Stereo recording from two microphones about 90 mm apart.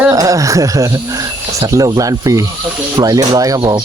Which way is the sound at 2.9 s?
50° right (ahead or behind).